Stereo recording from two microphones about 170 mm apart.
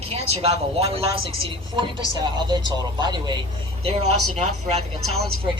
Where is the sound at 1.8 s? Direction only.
25° right (ahead or behind).